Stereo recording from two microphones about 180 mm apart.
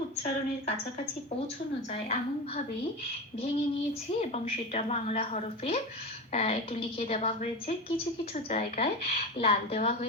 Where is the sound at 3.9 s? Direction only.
35° left (ahead or behind).